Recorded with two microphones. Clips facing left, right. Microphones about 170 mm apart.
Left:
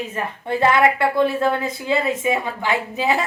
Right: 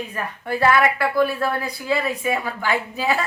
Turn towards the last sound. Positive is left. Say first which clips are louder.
# left 2 dB
turn(degrees=20)  # may be behind; listen again after turning